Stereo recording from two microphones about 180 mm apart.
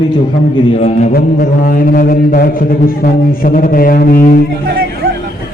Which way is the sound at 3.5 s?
50° left (ahead or behind).